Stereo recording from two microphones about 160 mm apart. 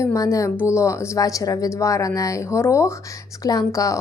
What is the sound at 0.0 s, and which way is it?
A woman's voice, 20° left (ahead or behind).